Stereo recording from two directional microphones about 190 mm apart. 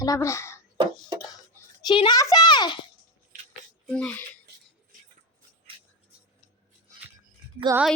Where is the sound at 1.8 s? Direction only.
25° left (ahead or behind).